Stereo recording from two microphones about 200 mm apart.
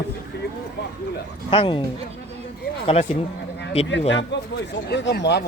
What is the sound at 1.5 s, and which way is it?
Speech, 25° left (ahead or behind).